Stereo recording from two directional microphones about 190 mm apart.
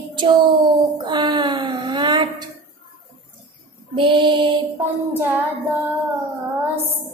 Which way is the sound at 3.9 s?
25° right (ahead or behind).